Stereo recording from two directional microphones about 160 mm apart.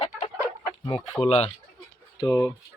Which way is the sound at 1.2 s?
40° left (ahead or behind).